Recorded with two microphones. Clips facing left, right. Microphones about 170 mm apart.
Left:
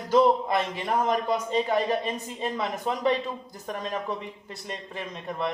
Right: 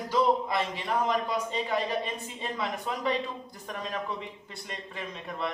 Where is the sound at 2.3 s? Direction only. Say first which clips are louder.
Left 4 dB; centre (ahead or behind).